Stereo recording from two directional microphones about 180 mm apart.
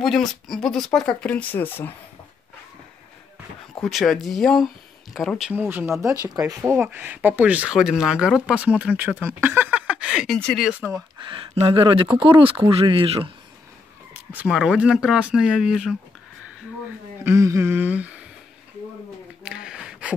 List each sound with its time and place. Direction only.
0.0 s speech: centre (ahead or behind)
3.8 s speech: centre (ahead or behind); by 6.5 s 20° right (ahead or behind)
6.5 s speech: 10° right (ahead or behind)
11.3 s speech: 30° right (ahead or behind)
14.3 s speech: 5° right (ahead or behind)
17.2 s speech: 15° right (ahead or behind)
19.4 s a sound: 5° right (ahead or behind)